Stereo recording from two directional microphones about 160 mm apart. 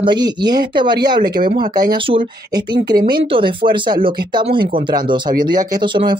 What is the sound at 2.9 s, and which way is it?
Speech, 65° right (ahead or behind).